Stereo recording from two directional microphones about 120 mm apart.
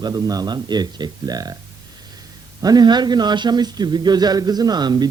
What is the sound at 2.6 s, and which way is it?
A man's voice, 35° right (ahead or behind).